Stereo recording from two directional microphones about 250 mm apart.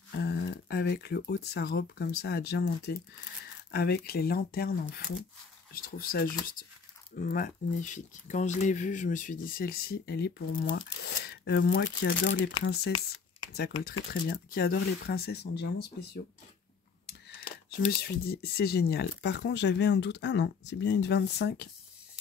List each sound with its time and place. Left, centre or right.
0.2 s speech: left
7.2 s speech: left
13.8 s speech: left
17.8 s speech: left